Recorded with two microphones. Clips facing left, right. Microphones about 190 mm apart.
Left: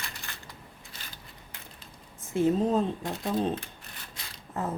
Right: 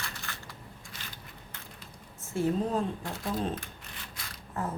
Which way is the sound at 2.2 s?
15° left (ahead or behind).